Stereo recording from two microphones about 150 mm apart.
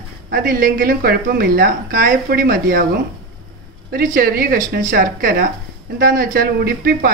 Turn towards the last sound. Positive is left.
turn(degrees=-90)